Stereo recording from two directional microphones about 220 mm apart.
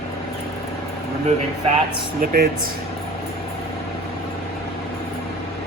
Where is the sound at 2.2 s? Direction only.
45° right (ahead or behind).